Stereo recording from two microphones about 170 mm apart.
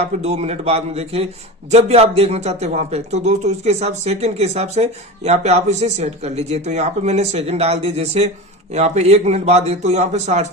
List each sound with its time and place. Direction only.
0.0 s a man's voice: 40° right (ahead or behind)